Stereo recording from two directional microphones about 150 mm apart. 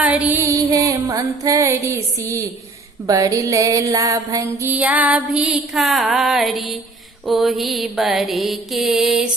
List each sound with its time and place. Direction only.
0.0 s music: 10° right (ahead or behind)
4.7 s mantra: 10° right (ahead or behind)